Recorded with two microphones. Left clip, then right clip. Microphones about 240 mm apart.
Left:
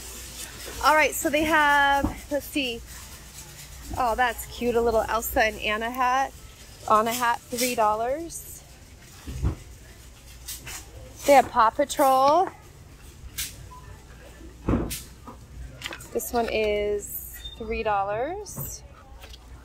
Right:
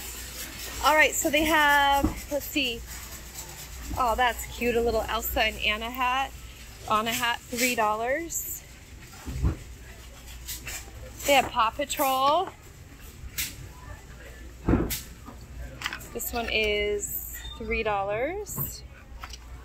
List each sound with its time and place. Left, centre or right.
0.8 s speech: centre
3.9 s speech: centre
11.2 s speech: left
15.8 s speech: centre